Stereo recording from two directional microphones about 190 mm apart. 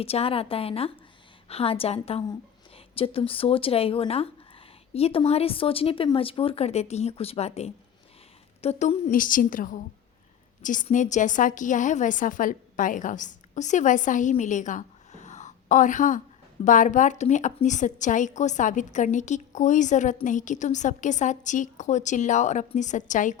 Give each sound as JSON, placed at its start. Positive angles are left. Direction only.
{"t": 0.0, "sound": "a woman's voice", "side_deg": 30}